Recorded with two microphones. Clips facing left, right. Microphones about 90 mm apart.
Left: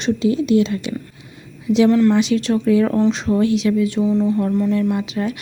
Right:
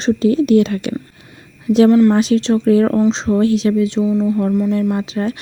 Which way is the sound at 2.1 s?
40° right (ahead or behind).